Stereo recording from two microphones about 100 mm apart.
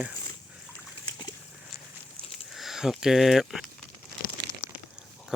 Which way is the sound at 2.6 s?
5° right (ahead or behind).